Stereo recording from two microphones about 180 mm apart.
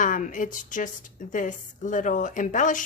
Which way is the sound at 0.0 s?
45° left (ahead or behind).